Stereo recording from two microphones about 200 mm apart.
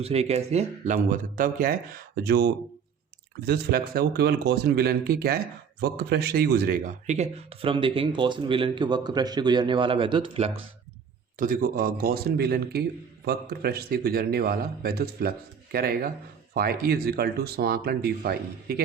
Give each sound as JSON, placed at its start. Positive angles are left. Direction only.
{"t": 0.0, "sound": "speech", "side_deg": -30}
{"t": 11.3, "sound": "speech", "side_deg": -45}